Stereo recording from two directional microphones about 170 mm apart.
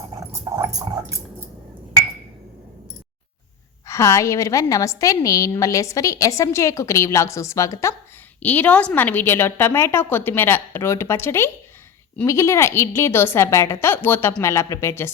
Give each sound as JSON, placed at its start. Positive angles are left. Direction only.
{"t": 0.3, "sound": "dog", "side_deg": -15}
{"t": 3.8, "sound": "a woman's voice", "side_deg": 20}